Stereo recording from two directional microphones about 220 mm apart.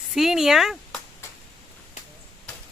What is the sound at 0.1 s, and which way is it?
Speech, centre (ahead or behind).